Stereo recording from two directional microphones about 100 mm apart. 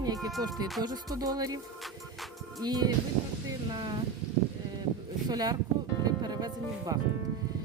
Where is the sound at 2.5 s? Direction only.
45° right (ahead or behind).